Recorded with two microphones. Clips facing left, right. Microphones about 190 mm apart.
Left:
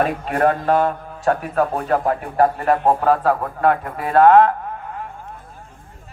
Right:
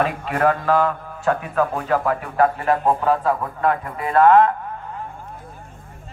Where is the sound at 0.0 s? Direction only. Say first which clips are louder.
Left 2 dB; 40° left (ahead or behind).